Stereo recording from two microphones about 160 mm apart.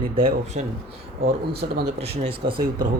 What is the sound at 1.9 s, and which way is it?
Speech, 40° right (ahead or behind).